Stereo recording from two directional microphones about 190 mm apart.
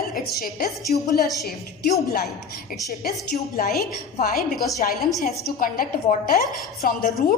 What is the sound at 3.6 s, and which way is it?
Speech, 55° left (ahead or behind).